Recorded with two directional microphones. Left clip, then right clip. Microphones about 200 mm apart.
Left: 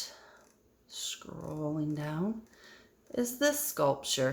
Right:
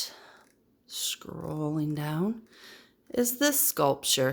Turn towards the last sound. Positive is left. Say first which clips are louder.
# right 4 dB
turn(degrees=-45)  # may be behind; listen again after turning